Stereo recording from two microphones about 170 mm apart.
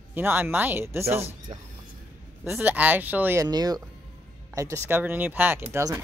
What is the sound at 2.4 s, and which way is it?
Speech, 10° right (ahead or behind).